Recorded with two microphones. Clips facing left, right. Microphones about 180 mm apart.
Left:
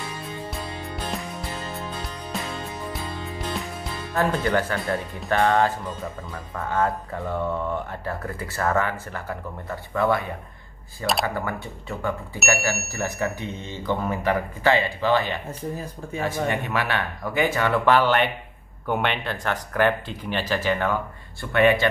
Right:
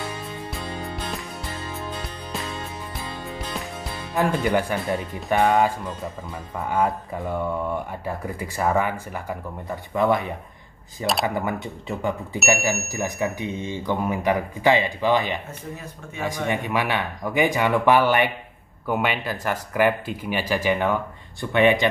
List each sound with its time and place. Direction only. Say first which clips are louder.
4.1 s speech: right 1 dB; 15° right (ahead or behind)
16.4 s speech: right 1 dB; 15° right (ahead or behind)